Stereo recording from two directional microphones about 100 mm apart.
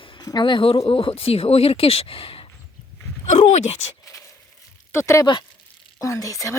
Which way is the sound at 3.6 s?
90° left.